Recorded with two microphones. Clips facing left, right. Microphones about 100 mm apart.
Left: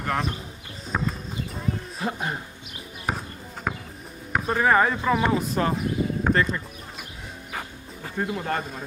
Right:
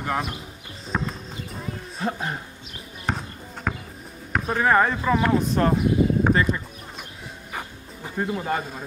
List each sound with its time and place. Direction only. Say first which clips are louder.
0.0 s speech: even; 5° right (ahead or behind)
0.9 s horse: even; centre (ahead or behind)
1.5 s a sound: left 4 dB; centre (ahead or behind)
3.1 s basketball bounce: right 1 dB; 5° left (ahead or behind)
4.3 s speech: even; centre (ahead or behind)
5.3 s a sound: right 3 dB; centre (ahead or behind)
7.5 s dog: even; 5° right (ahead or behind)